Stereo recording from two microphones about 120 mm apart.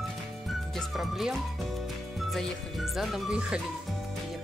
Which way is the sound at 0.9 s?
Centre (ahead or behind).